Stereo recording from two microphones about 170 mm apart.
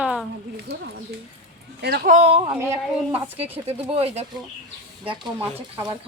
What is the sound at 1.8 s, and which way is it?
Speech, 65° right (ahead or behind).